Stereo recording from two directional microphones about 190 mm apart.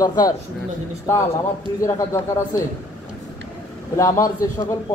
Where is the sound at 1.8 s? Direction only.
15° left (ahead or behind).